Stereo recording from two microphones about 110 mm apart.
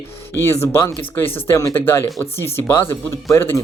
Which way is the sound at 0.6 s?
25° left (ahead or behind).